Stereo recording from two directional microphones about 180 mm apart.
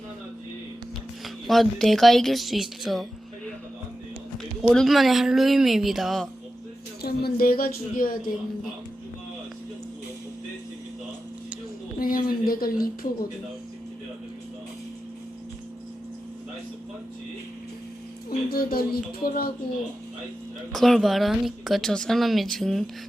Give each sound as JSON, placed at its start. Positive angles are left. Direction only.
{"t": 1.2, "sound": "speech", "side_deg": 0}
{"t": 4.6, "sound": "speech", "side_deg": 5}
{"t": 7.0, "sound": "speech", "side_deg": 60}
{"t": 11.9, "sound": "speech", "side_deg": 50}
{"t": 18.3, "sound": "speech", "side_deg": 55}
{"t": 20.7, "sound": "speech", "side_deg": 0}